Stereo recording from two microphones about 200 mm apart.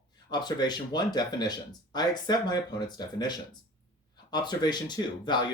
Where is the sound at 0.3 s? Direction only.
20° left (ahead or behind).